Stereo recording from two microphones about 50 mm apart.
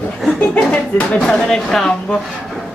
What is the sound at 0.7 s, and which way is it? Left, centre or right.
Speech, left.